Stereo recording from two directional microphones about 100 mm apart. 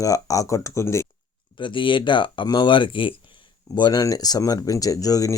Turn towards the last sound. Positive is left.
turn(degrees=35)  # may be behind; listen again after turning